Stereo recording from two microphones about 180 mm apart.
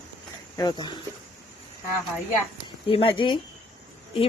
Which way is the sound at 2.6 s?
30° left (ahead or behind).